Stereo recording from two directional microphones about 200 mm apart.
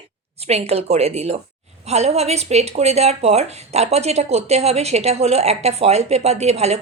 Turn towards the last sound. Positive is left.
turn(degrees=-30)  # may be behind; listen again after turning